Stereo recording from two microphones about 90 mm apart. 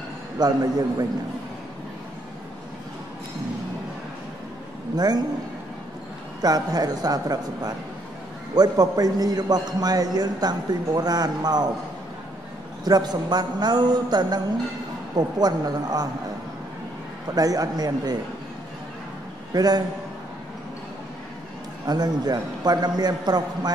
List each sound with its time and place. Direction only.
0.4 s a man's voice: 50° right (ahead or behind)
4.9 s a man's voice: 45° right (ahead or behind)
6.4 s a man's voice: 45° right (ahead or behind)
12.8 s a man's voice: 50° right (ahead or behind)
17.4 s a man's voice: 45° right (ahead or behind)
19.5 s a man's voice: 45° right (ahead or behind)
21.8 s a man's voice: 50° right (ahead or behind)